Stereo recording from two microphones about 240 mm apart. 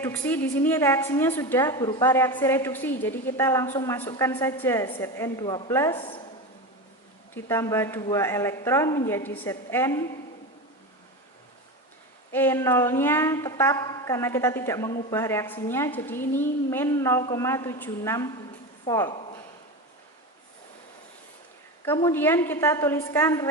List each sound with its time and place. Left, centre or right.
0.0 s a woman's voice: centre
7.4 s a woman's voice: centre
12.3 s a woman's voice: centre
21.8 s a woman's voice: centre